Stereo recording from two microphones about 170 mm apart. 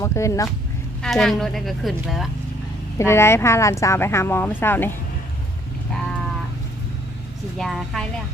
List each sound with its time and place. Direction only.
0.0 s speech: 15° left (ahead or behind)
1.0 s a woman's voice: centre (ahead or behind)
3.0 s speech: 15° left (ahead or behind)
7.6 s a woman's voice: centre (ahead or behind)